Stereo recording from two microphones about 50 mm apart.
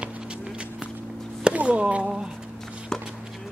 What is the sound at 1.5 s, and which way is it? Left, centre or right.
Chop, right.